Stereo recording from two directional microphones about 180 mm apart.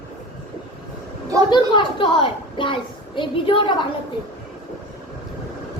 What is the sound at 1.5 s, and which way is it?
A woman's voice, 25° left (ahead or behind).